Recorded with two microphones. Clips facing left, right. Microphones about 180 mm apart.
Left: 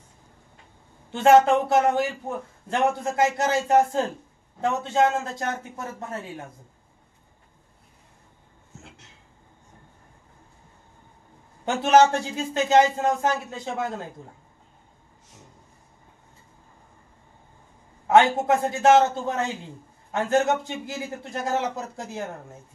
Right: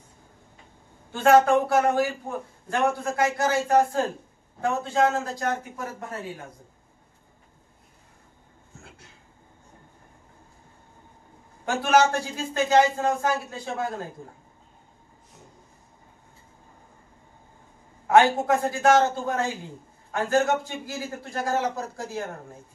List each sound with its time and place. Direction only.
1.1 s a man's voice: 20° left (ahead or behind)
11.6 s a man's voice: 20° left (ahead or behind)
18.0 s a man's voice: 20° left (ahead or behind)